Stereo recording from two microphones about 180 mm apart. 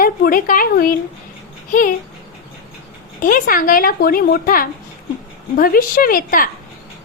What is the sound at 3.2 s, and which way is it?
A child's voice, 50° left (ahead or behind).